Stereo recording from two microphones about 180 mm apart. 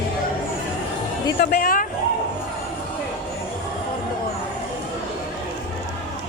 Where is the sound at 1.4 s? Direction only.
55° left (ahead or behind).